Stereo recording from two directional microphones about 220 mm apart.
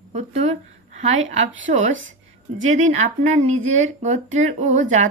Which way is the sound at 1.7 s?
35° right (ahead or behind).